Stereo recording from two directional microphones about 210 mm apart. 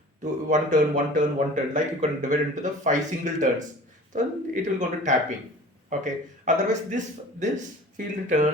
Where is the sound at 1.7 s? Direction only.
35° right (ahead or behind).